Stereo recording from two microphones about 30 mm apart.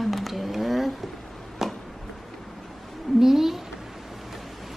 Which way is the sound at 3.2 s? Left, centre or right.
Centre.